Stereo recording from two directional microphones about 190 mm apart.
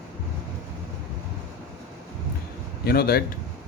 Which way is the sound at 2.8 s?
55° left (ahead or behind).